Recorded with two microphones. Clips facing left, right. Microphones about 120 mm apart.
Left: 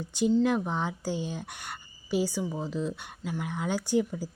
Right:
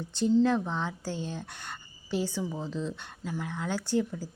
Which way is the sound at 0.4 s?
15° left (ahead or behind).